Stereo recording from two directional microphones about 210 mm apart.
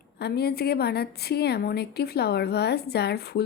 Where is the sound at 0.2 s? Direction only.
50° left (ahead or behind).